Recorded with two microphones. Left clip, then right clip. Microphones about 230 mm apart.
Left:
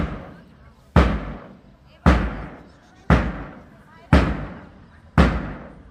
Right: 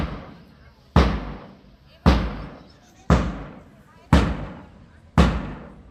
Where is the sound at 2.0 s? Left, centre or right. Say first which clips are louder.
Left 2 dB; right.